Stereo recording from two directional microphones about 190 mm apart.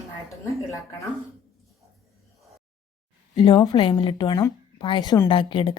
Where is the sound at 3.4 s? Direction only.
25° left (ahead or behind).